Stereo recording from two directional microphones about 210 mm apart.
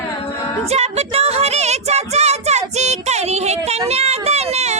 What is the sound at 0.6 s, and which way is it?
Child singing, 30° right (ahead or behind).